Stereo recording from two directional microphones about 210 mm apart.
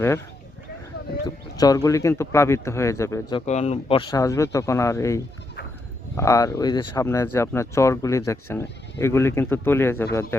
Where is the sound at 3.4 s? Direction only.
35° left (ahead or behind).